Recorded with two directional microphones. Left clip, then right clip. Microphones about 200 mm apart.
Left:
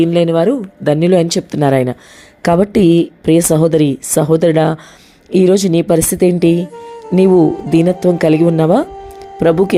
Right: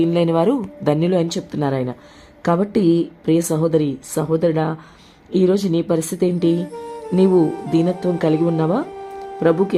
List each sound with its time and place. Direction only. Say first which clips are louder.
0.0 s speech: left 5 dB; 15° left (ahead or behind)
0.9 s a woman's voice: left 7 dB; 20° left (ahead or behind)